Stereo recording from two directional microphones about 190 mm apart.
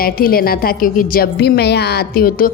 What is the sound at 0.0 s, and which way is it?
Speech, 50° left (ahead or behind).